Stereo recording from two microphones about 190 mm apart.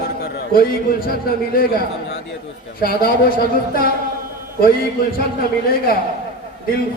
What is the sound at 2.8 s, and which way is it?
A woman's voice, 50° left (ahead or behind).